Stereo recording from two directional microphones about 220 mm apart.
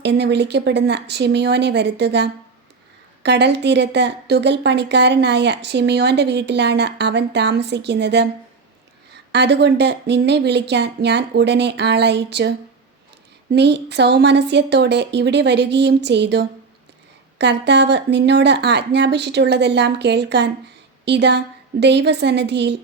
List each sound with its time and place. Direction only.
0.0 s a woman's voice: 50° right (ahead or behind)
9.3 s a woman's voice: 50° right (ahead or behind)